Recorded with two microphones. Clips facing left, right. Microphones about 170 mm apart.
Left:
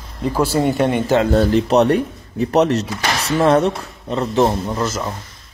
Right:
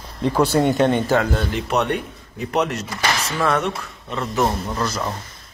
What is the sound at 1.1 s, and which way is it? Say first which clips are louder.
Speech: left 7 dB; 30° left (ahead or behind).